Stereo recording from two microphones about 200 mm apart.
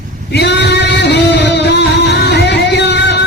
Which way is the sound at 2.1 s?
60° left (ahead or behind).